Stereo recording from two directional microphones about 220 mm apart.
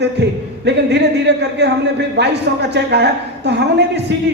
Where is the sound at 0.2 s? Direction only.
50° right (ahead or behind).